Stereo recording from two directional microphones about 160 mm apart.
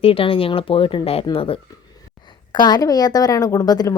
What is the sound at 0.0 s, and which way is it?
A woman's voice, 35° left (ahead or behind).